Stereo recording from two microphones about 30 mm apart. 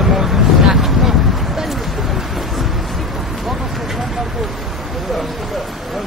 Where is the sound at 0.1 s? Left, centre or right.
Centre.